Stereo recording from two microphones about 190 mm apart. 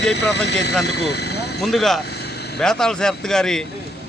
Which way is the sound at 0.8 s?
60° left (ahead or behind).